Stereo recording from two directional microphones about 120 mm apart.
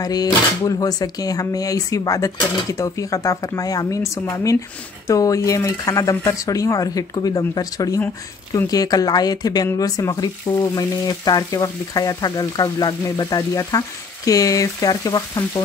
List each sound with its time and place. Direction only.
0.0 s speech: 30° left (ahead or behind)
8.5 s frying: 30° left (ahead or behind)